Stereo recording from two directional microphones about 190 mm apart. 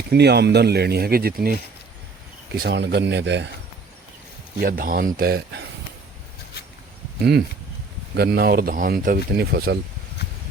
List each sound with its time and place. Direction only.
0.1 s speech: 60° right (ahead or behind)
2.6 s speech: 65° right (ahead or behind)
4.6 s speech: 50° right (ahead or behind)
7.2 s speech: 60° right (ahead or behind)